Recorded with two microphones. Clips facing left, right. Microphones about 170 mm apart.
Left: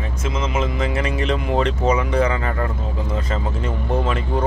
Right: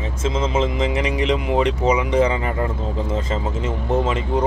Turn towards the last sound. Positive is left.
turn(degrees=-20)  # may be behind; listen again after turning